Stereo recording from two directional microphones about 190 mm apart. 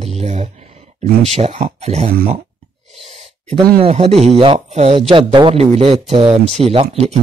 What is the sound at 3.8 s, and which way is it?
Speech, 35° right (ahead or behind).